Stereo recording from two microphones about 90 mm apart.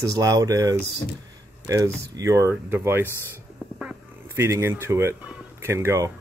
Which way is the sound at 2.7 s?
25° right (ahead or behind).